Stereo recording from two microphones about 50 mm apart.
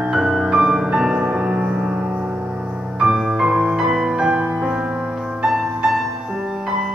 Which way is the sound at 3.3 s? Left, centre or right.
Centre.